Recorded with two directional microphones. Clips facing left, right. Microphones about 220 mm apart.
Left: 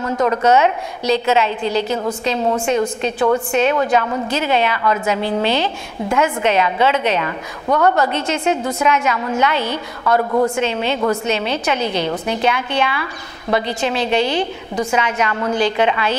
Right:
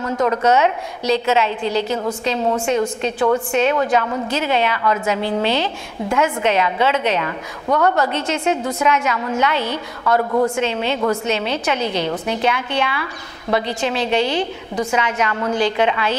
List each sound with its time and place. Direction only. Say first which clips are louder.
0.0 s a woman's voice: left 1 dB; 20° left (ahead or behind)
7.6 s a woman's voice: left 2 dB; 25° left (ahead or behind)
7.9 s a woman's voice: left 1 dB; 15° left (ahead or behind)